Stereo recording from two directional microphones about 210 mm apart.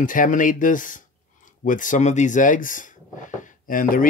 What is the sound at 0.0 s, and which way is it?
Speech, 40° left (ahead or behind).